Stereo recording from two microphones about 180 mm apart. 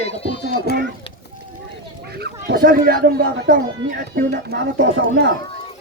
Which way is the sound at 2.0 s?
60° right (ahead or behind).